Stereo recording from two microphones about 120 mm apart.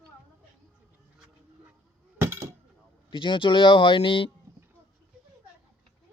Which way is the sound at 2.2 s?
20° right (ahead or behind).